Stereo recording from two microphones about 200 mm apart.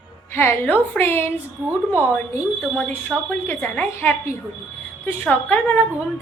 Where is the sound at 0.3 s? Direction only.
10° left (ahead or behind).